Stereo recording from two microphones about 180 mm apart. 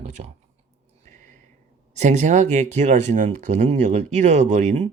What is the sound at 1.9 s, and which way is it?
Speech, 40° right (ahead or behind).